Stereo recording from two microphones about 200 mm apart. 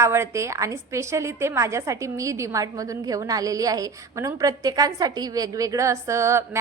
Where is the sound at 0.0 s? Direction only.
15° right (ahead or behind).